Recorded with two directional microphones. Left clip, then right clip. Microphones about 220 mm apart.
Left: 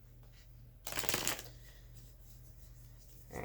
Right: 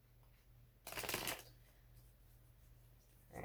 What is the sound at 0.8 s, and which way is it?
Shuffling cards, 15° left (ahead or behind).